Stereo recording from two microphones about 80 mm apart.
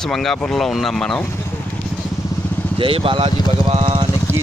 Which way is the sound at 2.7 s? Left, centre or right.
Right.